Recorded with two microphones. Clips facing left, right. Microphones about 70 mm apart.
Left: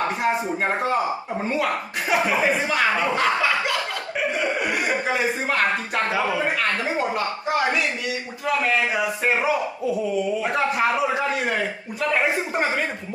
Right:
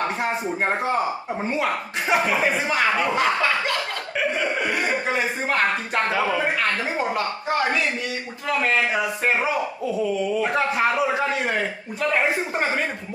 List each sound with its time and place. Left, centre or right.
0.6 s speech: centre
1.6 s speech: right
2.4 s speech: centre
4.8 s speech: centre
8.6 s speech: centre
10.4 s speech: centre